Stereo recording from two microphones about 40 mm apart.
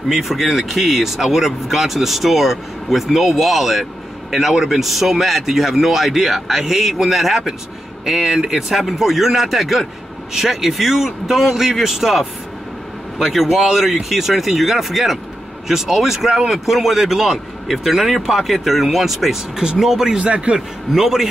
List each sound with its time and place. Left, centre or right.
0.1 s a man's voice: centre
20.2 s a man's voice: right
20.9 s speech: centre